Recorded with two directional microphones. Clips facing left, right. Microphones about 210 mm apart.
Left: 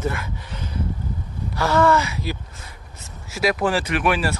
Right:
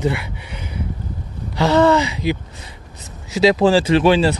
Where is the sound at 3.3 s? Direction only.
25° right (ahead or behind).